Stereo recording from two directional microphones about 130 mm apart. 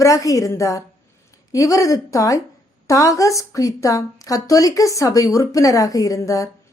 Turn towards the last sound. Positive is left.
turn(degrees=25)  # may be behind; listen again after turning